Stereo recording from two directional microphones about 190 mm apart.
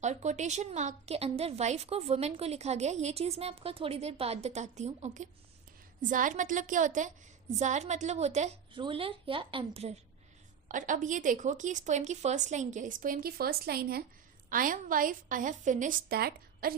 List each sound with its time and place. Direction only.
0.0 s a woman's voice: 35° right (ahead or behind); by 16.7 s 55° right (ahead or behind)